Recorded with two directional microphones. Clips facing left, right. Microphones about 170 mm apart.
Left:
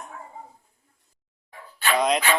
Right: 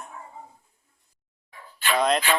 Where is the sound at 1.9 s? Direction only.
10° left (ahead or behind).